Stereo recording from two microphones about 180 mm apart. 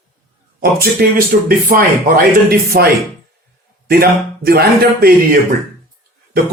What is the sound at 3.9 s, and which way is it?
Speech, 60° right (ahead or behind).